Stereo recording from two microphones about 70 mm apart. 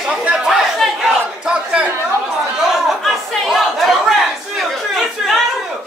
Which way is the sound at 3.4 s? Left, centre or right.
Centre.